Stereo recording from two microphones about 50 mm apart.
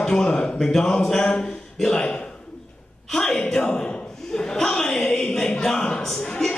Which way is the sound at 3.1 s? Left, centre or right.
Centre.